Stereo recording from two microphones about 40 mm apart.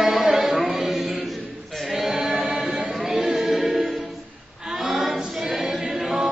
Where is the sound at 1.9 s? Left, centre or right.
Centre.